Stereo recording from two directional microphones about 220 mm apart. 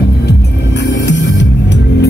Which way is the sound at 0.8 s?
55° left (ahead or behind).